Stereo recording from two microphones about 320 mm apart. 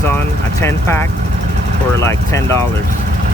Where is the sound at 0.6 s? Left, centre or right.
Centre.